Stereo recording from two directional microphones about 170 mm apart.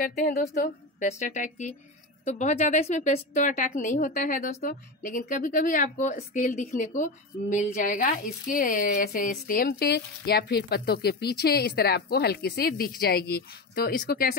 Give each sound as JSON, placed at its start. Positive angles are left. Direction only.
{"t": 0.0, "sound": "a woman's voice", "side_deg": 55}